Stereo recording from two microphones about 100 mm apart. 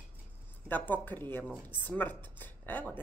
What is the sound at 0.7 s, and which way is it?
Speech, 20° left (ahead or behind).